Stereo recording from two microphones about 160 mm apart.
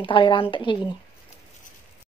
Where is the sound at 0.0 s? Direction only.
30° left (ahead or behind).